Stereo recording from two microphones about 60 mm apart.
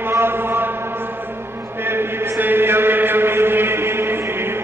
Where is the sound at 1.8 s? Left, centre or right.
Right.